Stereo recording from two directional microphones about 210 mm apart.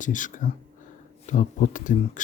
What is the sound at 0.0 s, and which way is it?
Speech, 40° left (ahead or behind).